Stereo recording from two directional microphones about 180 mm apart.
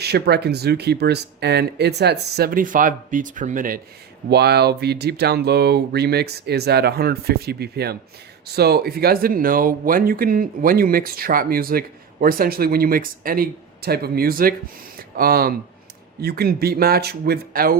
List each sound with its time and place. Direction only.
0.0 s speech: 65° right (ahead or behind); by 3.8 s 50° right (ahead or behind)
4.3 s speech: 65° right (ahead or behind)
14.9 s a sound: 55° right (ahead or behind)
16.2 s speech: 60° right (ahead or behind)